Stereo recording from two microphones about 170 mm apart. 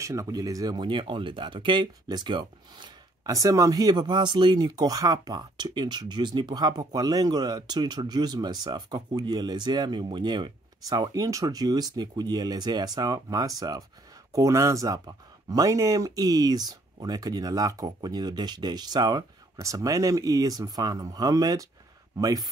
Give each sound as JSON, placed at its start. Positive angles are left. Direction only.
{"t": 0.0, "sound": "speech", "side_deg": -20}